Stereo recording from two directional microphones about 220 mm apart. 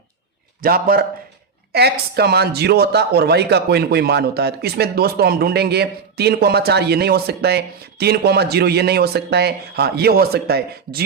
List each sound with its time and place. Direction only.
0.6 s a man's voice: 40° right (ahead or behind)